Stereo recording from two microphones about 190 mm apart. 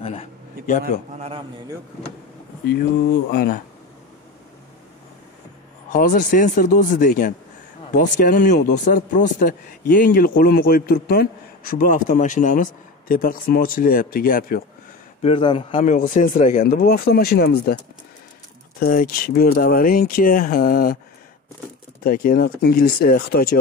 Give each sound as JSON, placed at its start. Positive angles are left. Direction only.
{"t": 0.0, "sound": "a man's voice", "side_deg": 30}
{"t": 1.1, "sound": "a sound", "side_deg": -35}
{"t": 3.3, "sound": "a man's voice", "side_deg": 55}
{"t": 5.9, "sound": "a man's voice", "side_deg": 45}
{"t": 15.2, "sound": "a man's voice", "side_deg": 25}
{"t": 15.8, "sound": "speech", "side_deg": 40}
{"t": 16.6, "sound": "a man's voice", "side_deg": 50}
{"t": 18.8, "sound": "a man's voice", "side_deg": 50}
{"t": 22.0, "sound": "a man's voice", "side_deg": 50}